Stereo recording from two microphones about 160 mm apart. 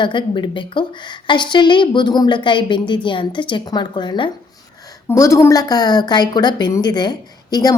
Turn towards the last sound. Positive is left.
turn(degrees=25)  # may be behind; listen again after turning